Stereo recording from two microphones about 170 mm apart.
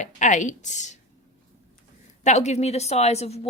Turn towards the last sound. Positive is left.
turn(degrees=40)  # may be behind; listen again after turning